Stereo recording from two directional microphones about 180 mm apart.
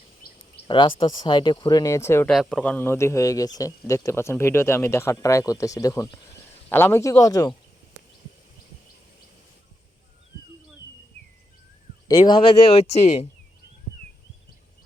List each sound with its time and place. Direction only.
0.2 s a sound: 55° left (ahead or behind)
0.7 s speech: 30° left (ahead or behind)
2.3 s a man's voice: 5° left (ahead or behind); by 7.5 s 20° left (ahead or behind)
12.1 s speech: 30° left (ahead or behind)